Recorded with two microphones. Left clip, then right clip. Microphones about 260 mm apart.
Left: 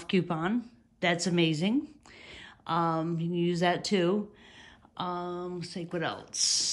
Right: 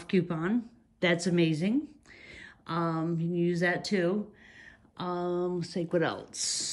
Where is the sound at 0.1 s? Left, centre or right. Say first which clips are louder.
Even; centre.